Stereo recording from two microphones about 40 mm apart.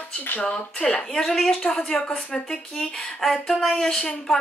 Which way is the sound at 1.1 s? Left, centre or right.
Centre.